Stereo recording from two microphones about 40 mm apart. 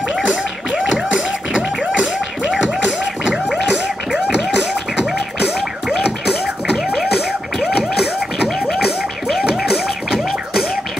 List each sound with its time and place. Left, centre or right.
0.7 s a sound: centre
3.3 s music: centre
9.7 s music: centre